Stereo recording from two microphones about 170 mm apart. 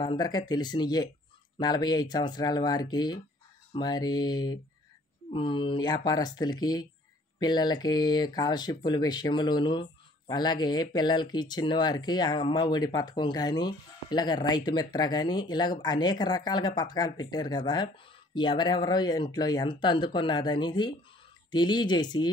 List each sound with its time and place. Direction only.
0.0 s speech: 25° left (ahead or behind)